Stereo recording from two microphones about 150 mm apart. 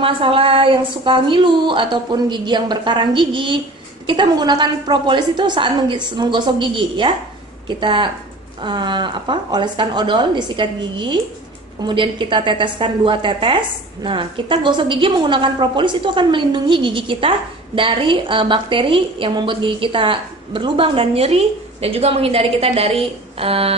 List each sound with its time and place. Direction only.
0.0 s a woman's voice: 35° right (ahead or behind)